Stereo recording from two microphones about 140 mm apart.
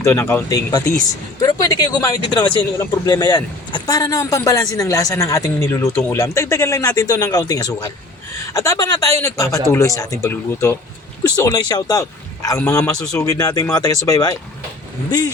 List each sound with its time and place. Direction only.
0.0 s speech: 20° left (ahead or behind)